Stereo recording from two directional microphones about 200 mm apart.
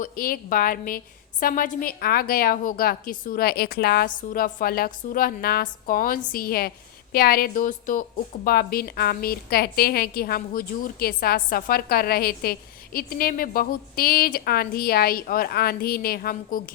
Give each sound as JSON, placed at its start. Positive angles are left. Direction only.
{"t": 0.0, "sound": "a woman's voice", "side_deg": 45}